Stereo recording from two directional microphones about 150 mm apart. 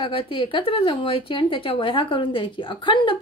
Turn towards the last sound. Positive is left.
turn(degrees=35)  # may be behind; listen again after turning